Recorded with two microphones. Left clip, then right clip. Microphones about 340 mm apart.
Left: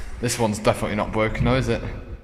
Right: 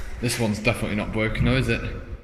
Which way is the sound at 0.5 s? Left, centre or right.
Left.